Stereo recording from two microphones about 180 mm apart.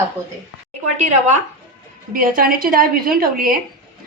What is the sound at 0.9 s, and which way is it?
Speech, 40° right (ahead or behind).